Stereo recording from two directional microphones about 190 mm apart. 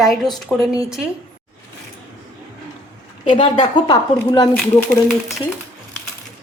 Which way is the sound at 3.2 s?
25° left (ahead or behind).